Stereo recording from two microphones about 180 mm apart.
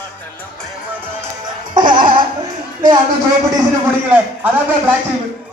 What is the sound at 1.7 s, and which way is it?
Music, 25° right (ahead or behind).